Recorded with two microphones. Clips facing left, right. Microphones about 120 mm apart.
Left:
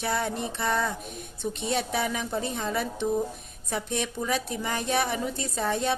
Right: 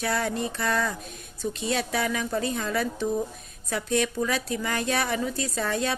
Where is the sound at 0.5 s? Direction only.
25° left (ahead or behind).